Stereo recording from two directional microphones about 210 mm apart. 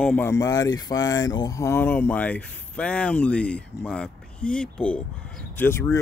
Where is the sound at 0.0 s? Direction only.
10° left (ahead or behind).